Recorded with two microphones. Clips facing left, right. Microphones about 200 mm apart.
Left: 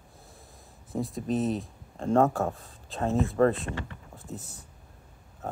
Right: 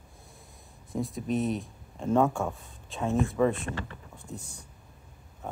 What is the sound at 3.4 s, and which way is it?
Speech, 50° left (ahead or behind).